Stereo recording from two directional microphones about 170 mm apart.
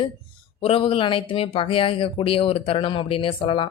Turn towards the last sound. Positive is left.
turn(degrees=30)  # may be behind; listen again after turning